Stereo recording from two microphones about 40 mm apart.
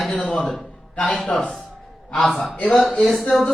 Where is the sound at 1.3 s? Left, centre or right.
Centre.